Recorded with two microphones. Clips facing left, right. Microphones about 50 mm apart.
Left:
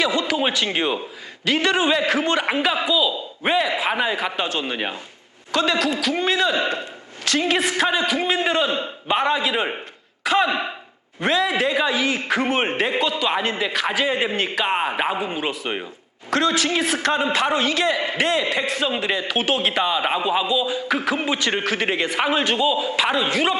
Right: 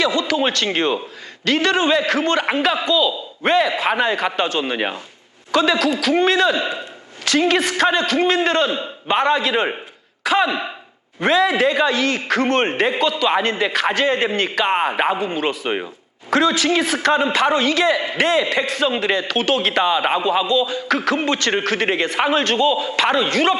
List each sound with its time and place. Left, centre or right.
0.0 s a man's voice: centre
22.2 s a man's voice: centre